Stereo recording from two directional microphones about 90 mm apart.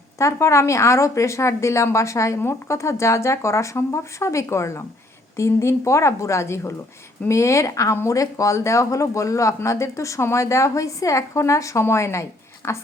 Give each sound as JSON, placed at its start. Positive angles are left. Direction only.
{"t": 0.2, "sound": "speech", "side_deg": 35}